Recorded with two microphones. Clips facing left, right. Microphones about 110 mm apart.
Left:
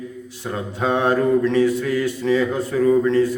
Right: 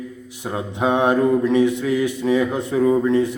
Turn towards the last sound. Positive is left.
turn(degrees=-15)  # may be behind; listen again after turning